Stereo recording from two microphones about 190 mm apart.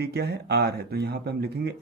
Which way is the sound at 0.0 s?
55° right (ahead or behind).